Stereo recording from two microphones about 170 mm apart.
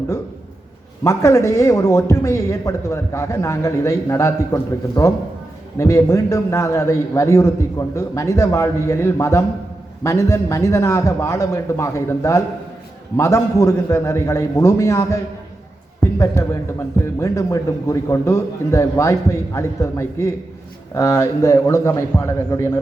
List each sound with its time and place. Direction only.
1.0 s speech: 15° left (ahead or behind)
16.0 s a sound: 15° left (ahead or behind)
17.2 s speech: 20° left (ahead or behind)